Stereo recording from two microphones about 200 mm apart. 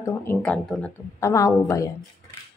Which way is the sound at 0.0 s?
10° left (ahead or behind).